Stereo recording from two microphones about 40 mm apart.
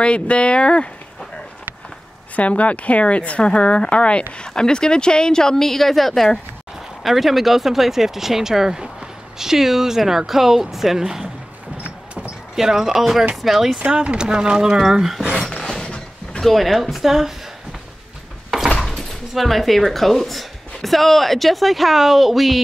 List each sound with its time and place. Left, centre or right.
0.0 s speech: left
2.3 s speech: left; by 6.4 s centre
7.0 s speech: centre
12.5 s speech: centre
13.9 s speech: right
14.9 s speech: centre
15.3 s a sound: centre
15.7 s a sound: centre
16.4 s speech: centre
18.9 s speech: centre